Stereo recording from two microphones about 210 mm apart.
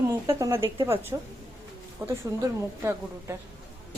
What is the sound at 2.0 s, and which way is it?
A woman's voice, 10° right (ahead or behind).